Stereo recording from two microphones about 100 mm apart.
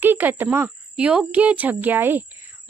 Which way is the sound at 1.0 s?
10° right (ahead or behind).